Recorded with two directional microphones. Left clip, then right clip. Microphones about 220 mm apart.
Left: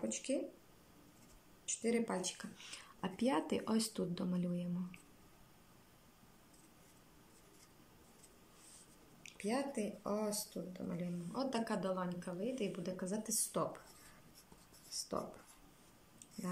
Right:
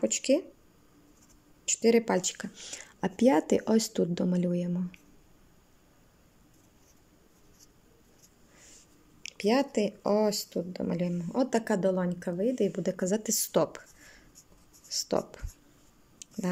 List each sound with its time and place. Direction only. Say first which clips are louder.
0.0 s speech: right 14 dB; 45° right (ahead or behind)
1.7 s speech: right 13 dB; 45° right (ahead or behind)
2.5 s speech: right 8 dB; 25° right (ahead or behind)
9.2 s speech: right 13 dB; 40° right (ahead or behind)
14.9 s speech: right 12 dB; 40° right (ahead or behind)